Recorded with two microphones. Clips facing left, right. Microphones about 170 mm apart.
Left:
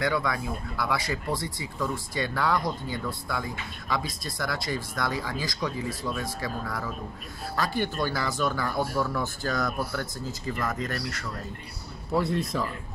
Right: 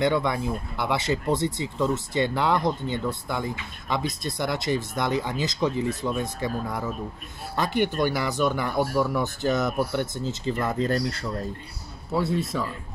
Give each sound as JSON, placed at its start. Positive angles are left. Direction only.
{"t": 0.0, "sound": "speech", "side_deg": -25}
{"t": 12.1, "sound": "speech", "side_deg": 0}